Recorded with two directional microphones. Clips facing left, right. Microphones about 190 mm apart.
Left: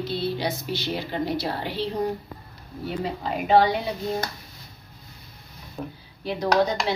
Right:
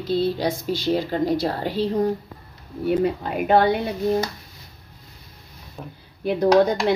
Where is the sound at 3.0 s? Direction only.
55° right (ahead or behind).